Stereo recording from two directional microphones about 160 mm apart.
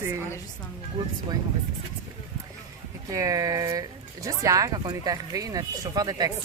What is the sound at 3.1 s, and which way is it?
Speech, 20° right (ahead or behind).